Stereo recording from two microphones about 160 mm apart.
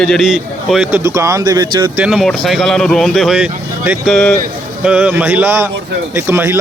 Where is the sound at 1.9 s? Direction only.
5° right (ahead or behind).